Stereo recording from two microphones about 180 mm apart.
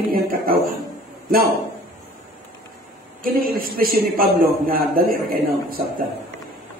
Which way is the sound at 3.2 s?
55° right (ahead or behind).